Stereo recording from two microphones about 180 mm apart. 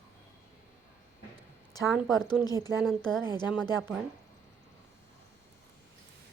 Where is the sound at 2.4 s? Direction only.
20° left (ahead or behind).